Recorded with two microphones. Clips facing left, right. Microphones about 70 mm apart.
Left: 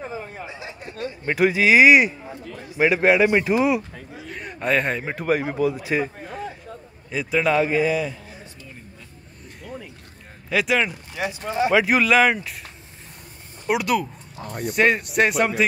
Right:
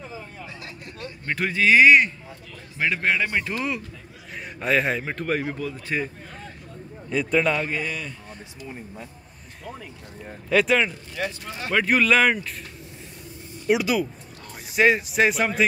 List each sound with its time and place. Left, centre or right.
0.6 s speech: centre
4.3 s a sound: centre
5.0 s speech: centre
10.5 s speech: centre
11.1 s speech: centre
13.7 s a sound: centre
14.6 s speech: centre